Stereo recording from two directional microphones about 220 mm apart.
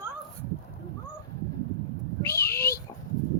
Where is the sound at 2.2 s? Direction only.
10° left (ahead or behind).